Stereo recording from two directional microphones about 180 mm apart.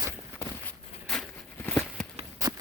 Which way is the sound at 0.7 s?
5° left (ahead or behind).